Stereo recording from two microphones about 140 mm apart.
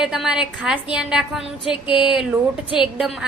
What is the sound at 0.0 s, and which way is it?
A woman's voice, 5° right (ahead or behind).